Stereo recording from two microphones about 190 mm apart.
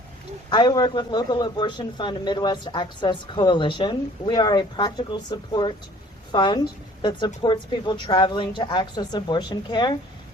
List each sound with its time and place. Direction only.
0.5 s speech: 20° left (ahead or behind)